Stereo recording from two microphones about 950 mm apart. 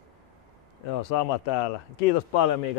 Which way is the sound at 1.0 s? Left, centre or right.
Left.